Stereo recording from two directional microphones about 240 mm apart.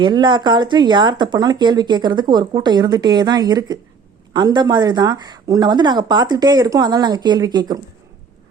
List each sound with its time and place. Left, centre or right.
0.0 s speech: centre